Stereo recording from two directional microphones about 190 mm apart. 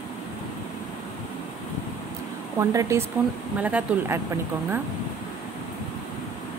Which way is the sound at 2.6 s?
15° right (ahead or behind).